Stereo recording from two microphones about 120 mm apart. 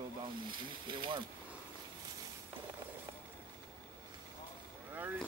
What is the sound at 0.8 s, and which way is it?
Speech, 40° right (ahead or behind).